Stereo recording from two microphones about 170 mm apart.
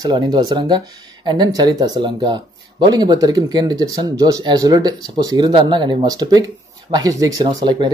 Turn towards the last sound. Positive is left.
turn(degrees=-25)  # may be behind; listen again after turning